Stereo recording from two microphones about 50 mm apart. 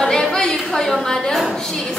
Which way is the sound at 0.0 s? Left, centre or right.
Centre.